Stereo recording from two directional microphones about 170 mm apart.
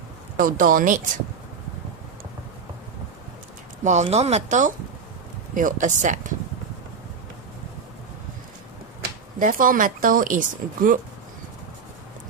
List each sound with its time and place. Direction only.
0.4 s speech: 55° right (ahead or behind)
3.8 s speech: 40° right (ahead or behind)
9.4 s speech: 55° right (ahead or behind)